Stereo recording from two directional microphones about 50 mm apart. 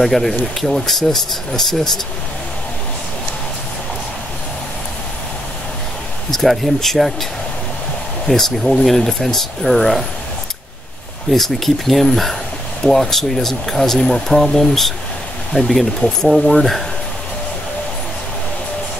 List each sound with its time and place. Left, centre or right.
0.0 s speech: centre
6.3 s speech: centre
8.3 s speech: centre
11.2 s speech: centre